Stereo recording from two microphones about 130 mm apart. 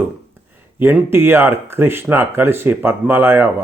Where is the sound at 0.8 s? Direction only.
15° right (ahead or behind).